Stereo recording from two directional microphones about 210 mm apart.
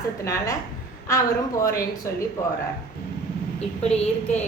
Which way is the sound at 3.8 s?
30° left (ahead or behind).